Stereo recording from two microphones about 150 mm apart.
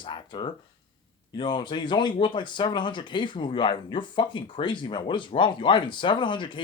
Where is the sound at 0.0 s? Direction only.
30° left (ahead or behind).